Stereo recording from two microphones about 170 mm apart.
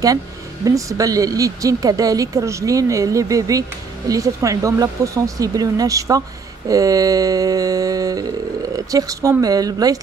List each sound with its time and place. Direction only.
0.7 s speech: 20° right (ahead or behind)